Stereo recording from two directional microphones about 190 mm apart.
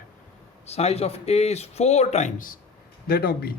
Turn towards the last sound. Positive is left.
turn(degrees=55)  # may be behind; listen again after turning